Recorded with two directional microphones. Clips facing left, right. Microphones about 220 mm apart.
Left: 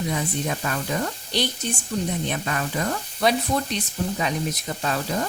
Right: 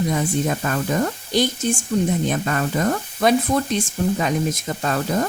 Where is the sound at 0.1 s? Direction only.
45° right (ahead or behind).